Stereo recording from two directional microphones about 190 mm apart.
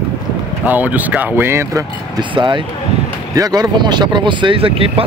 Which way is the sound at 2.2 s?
25° right (ahead or behind).